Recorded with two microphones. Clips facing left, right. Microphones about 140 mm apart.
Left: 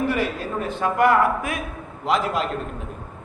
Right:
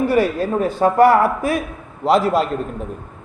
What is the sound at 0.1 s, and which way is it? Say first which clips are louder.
A man's voice: right 7 dB; 40° right (ahead or behind).